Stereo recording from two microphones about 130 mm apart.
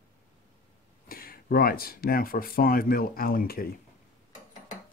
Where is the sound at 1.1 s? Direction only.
90° left.